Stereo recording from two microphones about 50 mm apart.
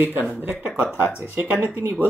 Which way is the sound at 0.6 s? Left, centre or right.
Right.